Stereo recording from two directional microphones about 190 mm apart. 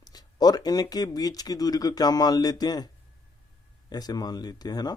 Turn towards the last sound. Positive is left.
turn(degrees=20)  # may be behind; listen again after turning